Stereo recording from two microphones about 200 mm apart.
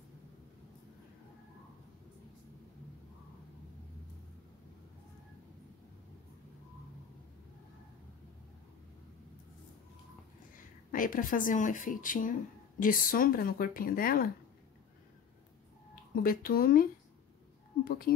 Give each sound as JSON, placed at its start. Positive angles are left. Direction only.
{"t": 10.9, "sound": "speech", "side_deg": 45}
{"t": 15.9, "sound": "speech", "side_deg": 45}
{"t": 17.8, "sound": "speech", "side_deg": 50}